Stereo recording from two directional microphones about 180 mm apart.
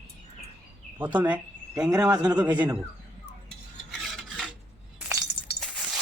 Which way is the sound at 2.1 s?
25° right (ahead or behind).